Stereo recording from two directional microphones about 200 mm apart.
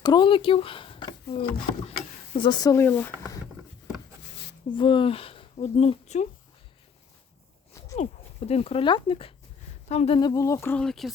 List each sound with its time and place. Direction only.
0.0 s speech: 20° left (ahead or behind)
4.2 s a sound: 65° left (ahead or behind)
4.7 s speech: 25° left (ahead or behind)
7.9 s speech: 30° left (ahead or behind)
10.2 s speech: 20° left (ahead or behind); by 11.1 s centre (ahead or behind)